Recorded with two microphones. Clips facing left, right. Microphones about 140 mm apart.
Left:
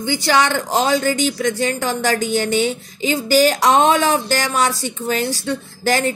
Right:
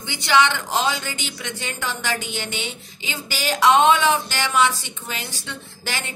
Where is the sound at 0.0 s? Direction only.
40° left (ahead or behind).